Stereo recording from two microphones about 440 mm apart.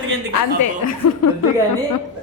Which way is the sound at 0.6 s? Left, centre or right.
Left.